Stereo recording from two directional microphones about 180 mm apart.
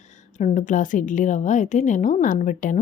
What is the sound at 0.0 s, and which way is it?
A woman's voice, 40° left (ahead or behind).